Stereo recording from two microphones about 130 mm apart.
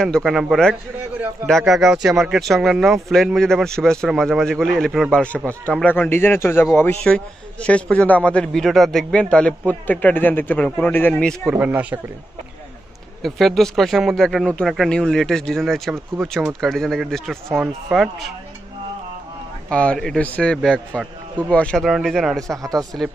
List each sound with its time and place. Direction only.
0.0 s a man's voice: 5° left (ahead or behind); by 6.7 s 20° left (ahead or behind)
7.1 s a man's voice: 5° left (ahead or behind)
11.5 s speech: 10° right (ahead or behind)
13.2 s speech: centre (ahead or behind)
19.7 s a man's voice: 10° left (ahead or behind)
22.6 s speech: 30° right (ahead or behind)